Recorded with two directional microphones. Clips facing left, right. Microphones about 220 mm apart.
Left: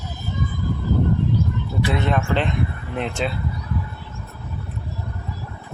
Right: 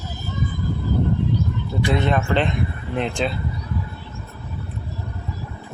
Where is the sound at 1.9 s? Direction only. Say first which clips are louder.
Right 2 dB; centre (ahead or behind).